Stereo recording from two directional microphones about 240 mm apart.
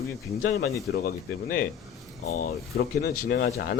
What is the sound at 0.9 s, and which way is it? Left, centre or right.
Speech, left.